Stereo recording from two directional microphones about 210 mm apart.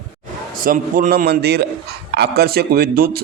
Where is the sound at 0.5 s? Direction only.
40° right (ahead or behind).